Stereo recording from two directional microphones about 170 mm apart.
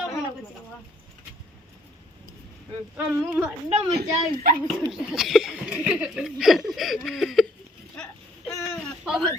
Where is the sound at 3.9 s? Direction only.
65° right (ahead or behind).